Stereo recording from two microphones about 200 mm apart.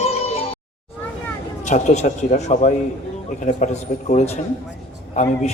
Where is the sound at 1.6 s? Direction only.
35° left (ahead or behind).